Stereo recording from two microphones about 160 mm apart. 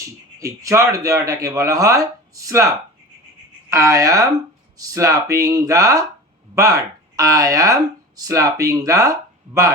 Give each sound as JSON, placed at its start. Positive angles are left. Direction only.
{"t": 0.3, "sound": "speech", "side_deg": -20}
{"t": 3.7, "sound": "speech", "side_deg": -20}